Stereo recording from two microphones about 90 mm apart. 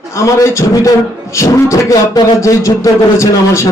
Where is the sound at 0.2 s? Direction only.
35° left (ahead or behind).